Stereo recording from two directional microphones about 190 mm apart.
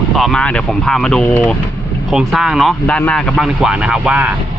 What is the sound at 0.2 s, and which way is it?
Speech, 5° left (ahead or behind).